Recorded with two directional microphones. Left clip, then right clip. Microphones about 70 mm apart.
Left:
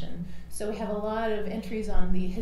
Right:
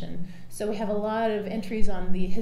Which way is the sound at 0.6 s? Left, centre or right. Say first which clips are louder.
Right 3 dB; right.